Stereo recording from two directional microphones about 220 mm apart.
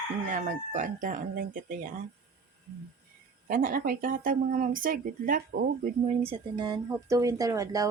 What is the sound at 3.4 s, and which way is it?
Speech, 40° right (ahead or behind).